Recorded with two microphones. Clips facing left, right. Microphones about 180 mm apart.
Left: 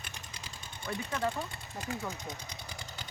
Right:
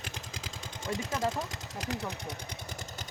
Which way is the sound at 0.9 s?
90° right.